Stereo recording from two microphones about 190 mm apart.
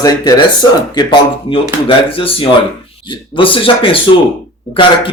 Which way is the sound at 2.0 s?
30° left (ahead or behind).